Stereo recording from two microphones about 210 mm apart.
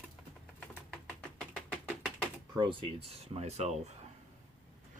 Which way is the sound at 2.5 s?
20° right (ahead or behind).